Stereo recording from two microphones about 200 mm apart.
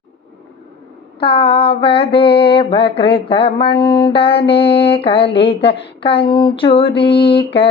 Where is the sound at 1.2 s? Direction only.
25° left (ahead or behind).